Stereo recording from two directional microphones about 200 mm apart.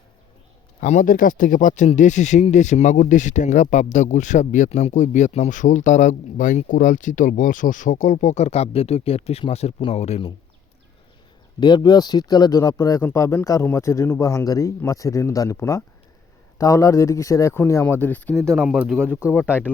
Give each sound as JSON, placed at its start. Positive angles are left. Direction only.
{"t": 0.8, "sound": "speech", "side_deg": 40}
{"t": 11.6, "sound": "speech", "side_deg": 20}
{"t": 18.4, "sound": "speech", "side_deg": -5}
{"t": 19.5, "sound": "speech", "side_deg": -5}